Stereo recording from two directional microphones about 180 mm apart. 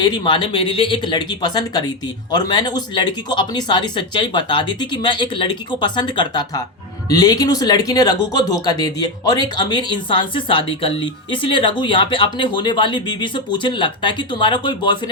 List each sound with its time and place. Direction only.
0.0 s speech: 25° left (ahead or behind)